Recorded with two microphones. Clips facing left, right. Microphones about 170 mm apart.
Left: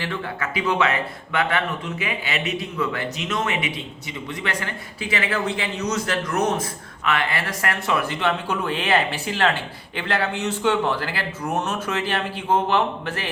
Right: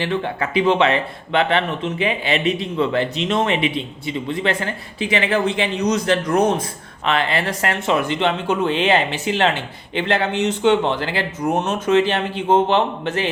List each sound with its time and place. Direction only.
0.0 s speech: 25° right (ahead or behind)
6.2 s speech: 30° right (ahead or behind)